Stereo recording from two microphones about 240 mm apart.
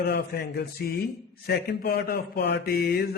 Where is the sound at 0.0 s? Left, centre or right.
Left.